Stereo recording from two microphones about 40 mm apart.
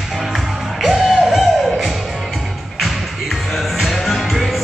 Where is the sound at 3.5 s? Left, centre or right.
Centre.